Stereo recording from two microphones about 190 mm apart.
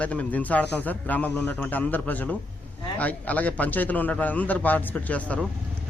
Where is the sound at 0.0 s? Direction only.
5° left (ahead or behind).